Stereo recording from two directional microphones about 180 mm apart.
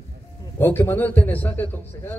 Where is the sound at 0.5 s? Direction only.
10° left (ahead or behind).